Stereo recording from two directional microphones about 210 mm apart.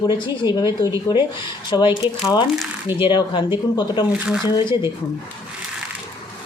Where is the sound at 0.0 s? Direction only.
20° left (ahead or behind).